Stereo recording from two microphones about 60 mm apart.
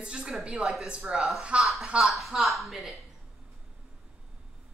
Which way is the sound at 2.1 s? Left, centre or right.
Centre.